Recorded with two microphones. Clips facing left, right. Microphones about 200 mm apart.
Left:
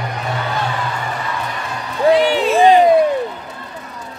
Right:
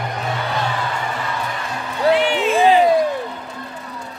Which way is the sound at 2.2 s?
35° left (ahead or behind).